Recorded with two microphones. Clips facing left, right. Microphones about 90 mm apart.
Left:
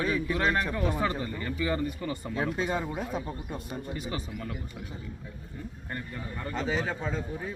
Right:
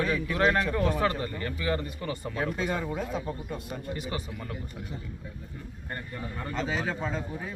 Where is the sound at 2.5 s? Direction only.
30° left (ahead or behind).